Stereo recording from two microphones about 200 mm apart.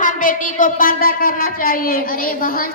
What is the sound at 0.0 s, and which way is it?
A woman's voice, 40° left (ahead or behind).